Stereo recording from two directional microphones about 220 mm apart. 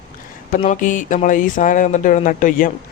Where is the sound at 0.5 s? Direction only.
35° left (ahead or behind).